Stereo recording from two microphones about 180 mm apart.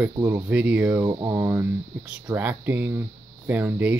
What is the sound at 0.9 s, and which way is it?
Speech, 20° right (ahead or behind).